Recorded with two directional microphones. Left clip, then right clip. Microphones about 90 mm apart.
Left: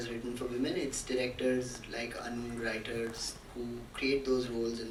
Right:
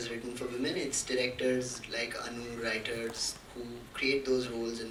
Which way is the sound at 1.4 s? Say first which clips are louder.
Right 1 dB; 20° right (ahead or behind).